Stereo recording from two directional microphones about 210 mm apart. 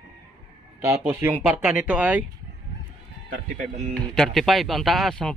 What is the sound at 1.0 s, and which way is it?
Speech, 10° right (ahead or behind).